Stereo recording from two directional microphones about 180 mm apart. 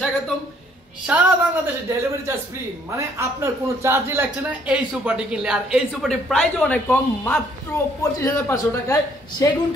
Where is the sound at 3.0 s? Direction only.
15° right (ahead or behind); by 9.6 s 20° left (ahead or behind).